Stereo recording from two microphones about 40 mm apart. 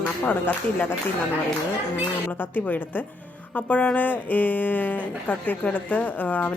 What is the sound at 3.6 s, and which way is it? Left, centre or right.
Speech, left.